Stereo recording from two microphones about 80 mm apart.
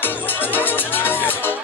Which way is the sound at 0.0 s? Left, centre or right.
Left.